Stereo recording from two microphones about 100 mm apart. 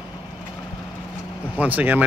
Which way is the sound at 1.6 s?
15° right (ahead or behind).